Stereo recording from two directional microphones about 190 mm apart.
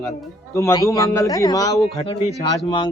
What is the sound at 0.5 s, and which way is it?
A man's voice, 15° left (ahead or behind).